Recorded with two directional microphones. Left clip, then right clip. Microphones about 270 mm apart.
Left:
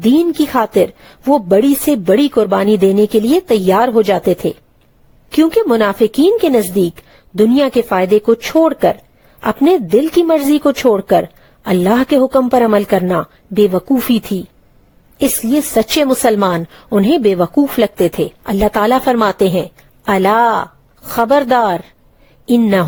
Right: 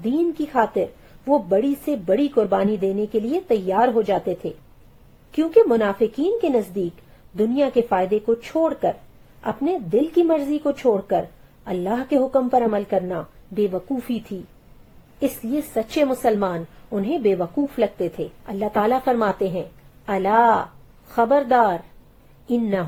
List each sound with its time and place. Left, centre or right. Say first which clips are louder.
0.0 s speech: left 10 dB; left
15.7 s speech: left 7 dB; left